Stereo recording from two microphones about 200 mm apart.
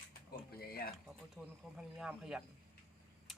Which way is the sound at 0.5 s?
50° left (ahead or behind).